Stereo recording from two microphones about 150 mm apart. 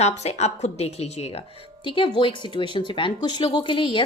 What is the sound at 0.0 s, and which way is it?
A woman's voice, 45° left (ahead or behind).